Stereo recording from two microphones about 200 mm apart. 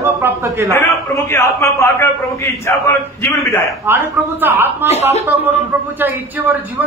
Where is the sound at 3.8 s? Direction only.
10° right (ahead or behind).